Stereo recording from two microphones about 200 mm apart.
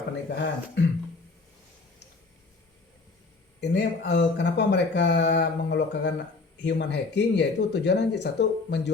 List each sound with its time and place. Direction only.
0.3 s speech: 55° left (ahead or behind)
3.6 s speech: 60° left (ahead or behind)